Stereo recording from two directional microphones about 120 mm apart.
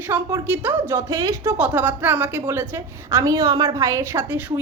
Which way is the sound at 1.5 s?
15° right (ahead or behind).